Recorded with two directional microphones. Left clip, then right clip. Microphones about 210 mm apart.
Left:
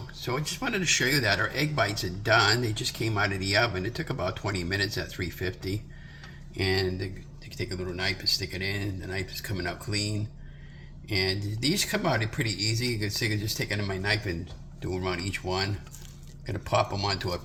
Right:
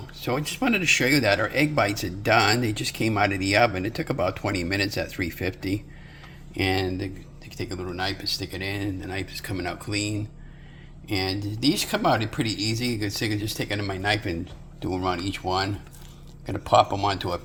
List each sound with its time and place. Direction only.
0.2 s speech: 45° right (ahead or behind)